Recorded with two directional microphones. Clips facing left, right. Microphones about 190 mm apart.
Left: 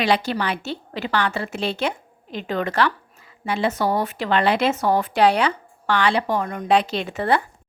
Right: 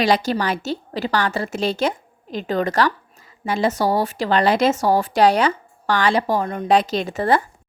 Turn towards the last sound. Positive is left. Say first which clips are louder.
# right 2 dB
turn(degrees=-40)  # may be behind; listen again after turning